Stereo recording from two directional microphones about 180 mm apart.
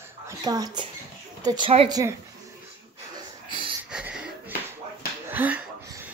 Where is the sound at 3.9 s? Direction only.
5° right (ahead or behind).